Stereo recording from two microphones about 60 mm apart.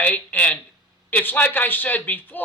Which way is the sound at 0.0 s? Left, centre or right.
Left.